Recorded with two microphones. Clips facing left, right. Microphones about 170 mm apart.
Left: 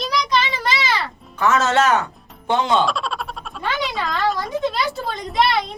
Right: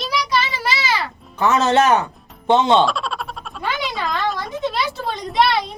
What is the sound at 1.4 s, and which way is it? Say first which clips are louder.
Speech: right 2 dB; 20° right (ahead or behind).